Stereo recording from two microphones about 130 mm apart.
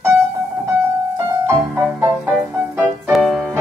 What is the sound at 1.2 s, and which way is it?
Music, 20° right (ahead or behind).